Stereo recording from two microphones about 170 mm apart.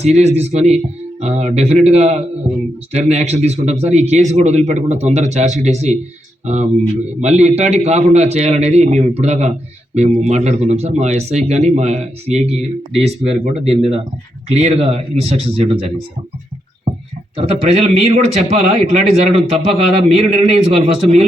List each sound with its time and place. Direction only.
0.0 s a man's voice: 40° right (ahead or behind)
17.3 s a man's voice: 35° right (ahead or behind)